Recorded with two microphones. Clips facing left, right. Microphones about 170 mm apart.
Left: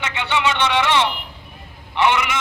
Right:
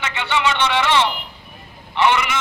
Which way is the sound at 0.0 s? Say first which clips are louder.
Even; 15° left (ahead or behind).